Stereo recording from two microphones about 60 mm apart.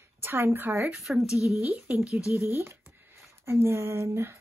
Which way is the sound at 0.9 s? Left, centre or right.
Centre.